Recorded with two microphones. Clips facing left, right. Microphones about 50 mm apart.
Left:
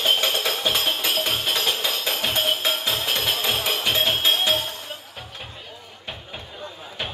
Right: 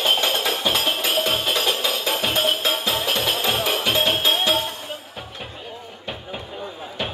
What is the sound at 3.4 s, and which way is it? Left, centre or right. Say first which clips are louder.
Music: right 2 dB; right.